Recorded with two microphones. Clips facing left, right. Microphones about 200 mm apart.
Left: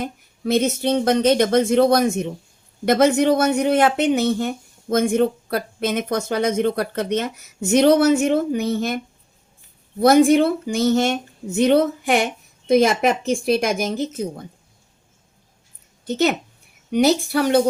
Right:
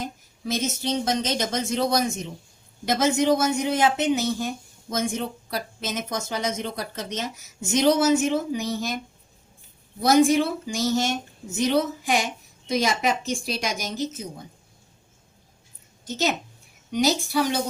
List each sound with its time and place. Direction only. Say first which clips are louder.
0.0 s speech: left 6 dB; 60° left (ahead or behind)
10.0 s speech: left 5 dB; 60° left (ahead or behind)
16.0 s speech: left 6 dB; 60° left (ahead or behind)